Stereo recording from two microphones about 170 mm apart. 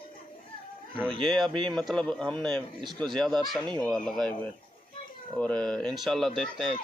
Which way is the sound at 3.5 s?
5° left (ahead or behind).